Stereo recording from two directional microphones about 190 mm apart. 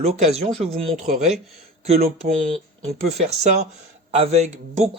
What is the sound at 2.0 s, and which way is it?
Speech, 50° right (ahead or behind).